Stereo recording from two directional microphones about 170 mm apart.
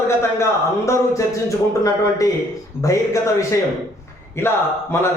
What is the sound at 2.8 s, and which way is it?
Speech, 20° left (ahead or behind).